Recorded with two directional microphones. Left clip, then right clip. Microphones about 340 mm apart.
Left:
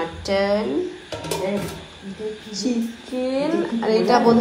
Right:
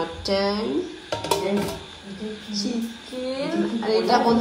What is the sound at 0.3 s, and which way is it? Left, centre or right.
Speech, centre.